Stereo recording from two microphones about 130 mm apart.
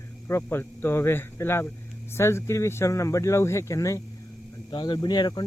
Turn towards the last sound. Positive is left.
turn(degrees=35)  # may be behind; listen again after turning